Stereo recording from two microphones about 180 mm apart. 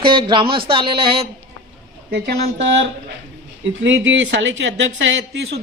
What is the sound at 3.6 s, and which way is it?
Speech, 90° right.